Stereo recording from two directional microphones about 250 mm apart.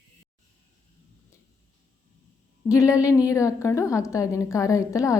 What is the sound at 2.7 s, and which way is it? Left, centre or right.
A woman's voice, centre.